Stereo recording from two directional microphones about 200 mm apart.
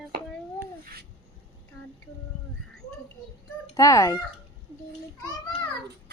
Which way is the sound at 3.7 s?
15° left (ahead or behind).